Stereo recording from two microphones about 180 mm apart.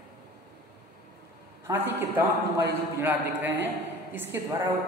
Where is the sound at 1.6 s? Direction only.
10° right (ahead or behind).